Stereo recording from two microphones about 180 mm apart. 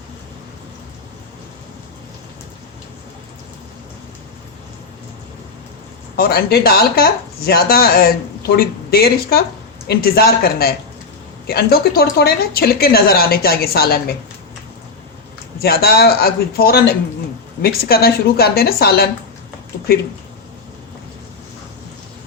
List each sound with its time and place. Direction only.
6.1 s speech: 60° left (ahead or behind)
15.6 s speech: 60° left (ahead or behind)